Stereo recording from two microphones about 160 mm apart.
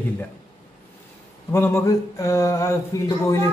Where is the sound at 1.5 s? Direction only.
15° left (ahead or behind).